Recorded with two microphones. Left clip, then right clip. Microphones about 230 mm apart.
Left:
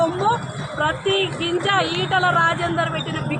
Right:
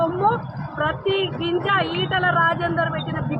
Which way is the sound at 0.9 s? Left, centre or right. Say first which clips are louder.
Left 2 dB; centre.